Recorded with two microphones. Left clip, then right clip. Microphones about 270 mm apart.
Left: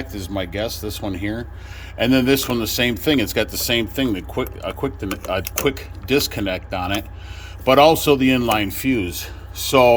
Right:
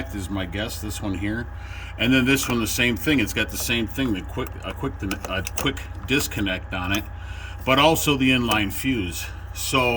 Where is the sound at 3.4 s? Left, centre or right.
Centre.